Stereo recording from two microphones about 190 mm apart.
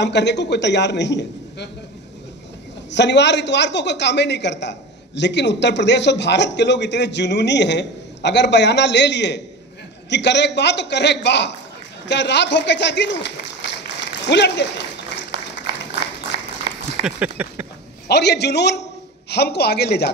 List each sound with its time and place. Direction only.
0.0 s a man's voice: 65° left (ahead or behind)
2.9 s a woman's voice: 65° left (ahead or behind)
17.0 s a sound: 10° right (ahead or behind)
18.0 s a man's voice: 60° left (ahead or behind)